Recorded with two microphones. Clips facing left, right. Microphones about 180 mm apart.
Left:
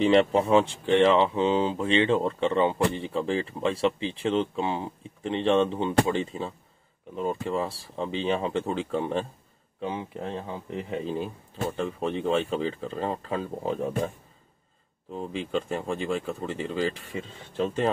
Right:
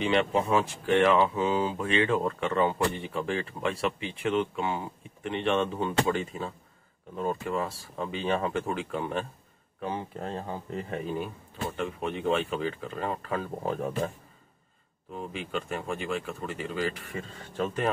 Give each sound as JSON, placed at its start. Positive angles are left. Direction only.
{"t": 0.0, "sound": "speech", "side_deg": 35}
{"t": 10.2, "sound": "speech", "side_deg": 20}
{"t": 15.1, "sound": "speech", "side_deg": 30}